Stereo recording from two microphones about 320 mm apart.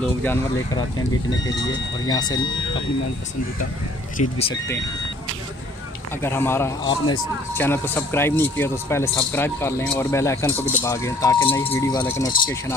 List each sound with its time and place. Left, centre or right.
0.2 s speech: centre
4.2 s speech: centre
6.2 s speech: centre